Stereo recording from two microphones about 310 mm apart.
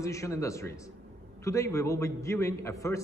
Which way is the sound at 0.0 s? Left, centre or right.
Centre.